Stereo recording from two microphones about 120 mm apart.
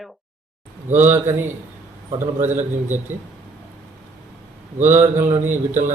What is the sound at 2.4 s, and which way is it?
Speech, 90° right.